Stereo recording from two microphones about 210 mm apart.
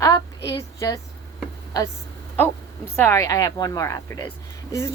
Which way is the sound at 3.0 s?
10° left (ahead or behind).